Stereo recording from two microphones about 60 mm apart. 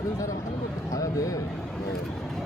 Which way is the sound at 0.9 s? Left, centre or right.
Left.